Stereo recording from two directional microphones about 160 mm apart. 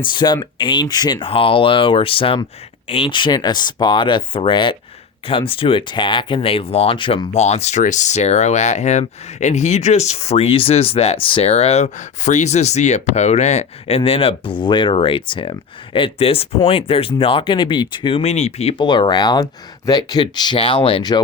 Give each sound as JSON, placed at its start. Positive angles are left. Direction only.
{"t": 0.0, "sound": "speech", "side_deg": 30}
{"t": 7.3, "sound": "speech", "side_deg": 45}
{"t": 18.8, "sound": "speech", "side_deg": 30}